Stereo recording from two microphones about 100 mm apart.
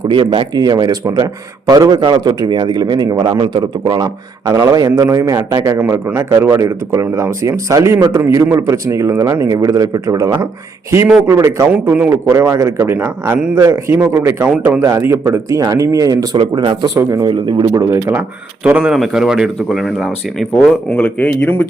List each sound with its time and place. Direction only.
0.1 s a man's voice: 55° right (ahead or behind); by 11.6 s 30° right (ahead or behind)
11.7 s a man's voice: 20° right (ahead or behind); by 16.4 s 35° right (ahead or behind)
16.4 s a man's voice: 50° right (ahead or behind)
17.8 s speech: 30° right (ahead or behind)
18.1 s speech: 15° right (ahead or behind); by 20.7 s centre (ahead or behind)
20.9 s speech: 15° left (ahead or behind)